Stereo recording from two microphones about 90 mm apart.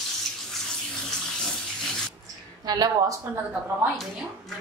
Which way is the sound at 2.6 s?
50° right (ahead or behind).